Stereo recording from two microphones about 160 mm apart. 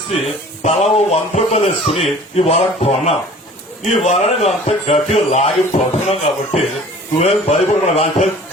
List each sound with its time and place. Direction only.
0.6 s a man's voice: 45° left (ahead or behind)